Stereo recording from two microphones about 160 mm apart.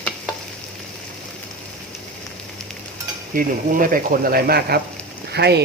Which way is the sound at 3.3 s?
60° right (ahead or behind).